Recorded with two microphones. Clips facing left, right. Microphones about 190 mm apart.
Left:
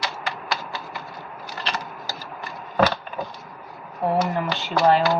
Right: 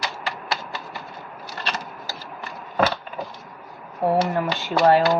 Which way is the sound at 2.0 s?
15° left (ahead or behind).